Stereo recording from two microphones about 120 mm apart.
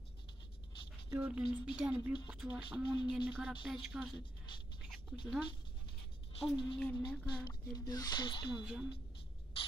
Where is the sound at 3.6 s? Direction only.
5° right (ahead or behind).